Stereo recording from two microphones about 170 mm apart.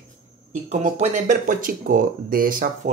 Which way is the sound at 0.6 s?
40° right (ahead or behind).